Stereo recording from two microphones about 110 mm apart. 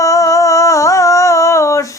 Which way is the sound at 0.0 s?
30° left (ahead or behind).